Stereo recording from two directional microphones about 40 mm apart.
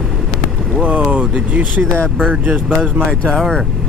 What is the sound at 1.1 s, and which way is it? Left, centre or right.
Speech, right.